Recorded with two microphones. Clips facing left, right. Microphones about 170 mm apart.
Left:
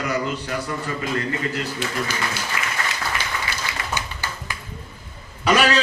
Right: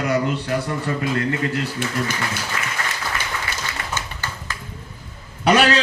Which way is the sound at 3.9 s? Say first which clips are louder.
Even; 15° left (ahead or behind).